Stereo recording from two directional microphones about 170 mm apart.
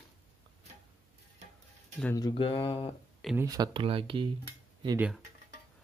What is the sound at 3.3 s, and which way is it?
Speech, 20° right (ahead or behind).